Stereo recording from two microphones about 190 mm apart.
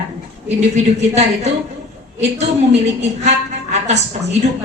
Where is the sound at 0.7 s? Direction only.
35° right (ahead or behind).